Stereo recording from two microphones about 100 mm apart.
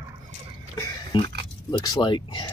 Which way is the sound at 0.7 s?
50° left (ahead or behind).